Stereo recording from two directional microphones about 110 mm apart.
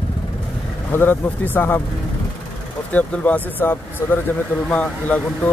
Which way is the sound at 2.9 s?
15° left (ahead or behind).